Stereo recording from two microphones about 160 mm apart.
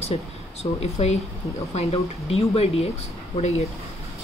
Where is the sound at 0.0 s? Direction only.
40° left (ahead or behind).